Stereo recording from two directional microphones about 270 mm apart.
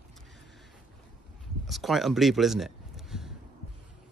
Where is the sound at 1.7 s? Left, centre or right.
Centre.